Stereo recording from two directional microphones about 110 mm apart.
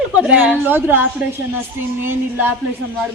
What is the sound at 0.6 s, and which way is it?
Speech, 15° right (ahead or behind).